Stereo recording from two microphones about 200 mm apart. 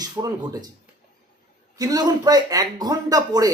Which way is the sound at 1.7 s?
20° right (ahead or behind).